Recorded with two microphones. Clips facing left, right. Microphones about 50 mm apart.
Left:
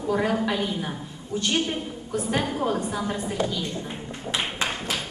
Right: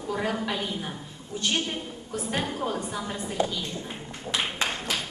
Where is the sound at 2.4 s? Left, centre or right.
Centre.